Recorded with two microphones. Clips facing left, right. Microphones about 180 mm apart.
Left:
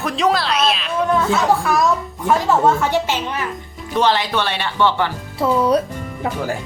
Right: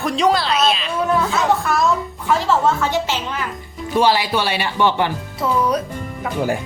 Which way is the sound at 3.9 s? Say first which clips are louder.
Right 1 dB; 10° right (ahead or behind).